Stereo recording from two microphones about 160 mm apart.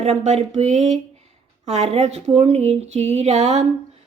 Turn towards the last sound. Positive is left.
turn(degrees=-45)  # may be behind; listen again after turning